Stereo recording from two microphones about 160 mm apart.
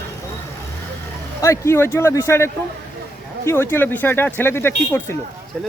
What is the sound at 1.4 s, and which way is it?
Speech, 15° left (ahead or behind).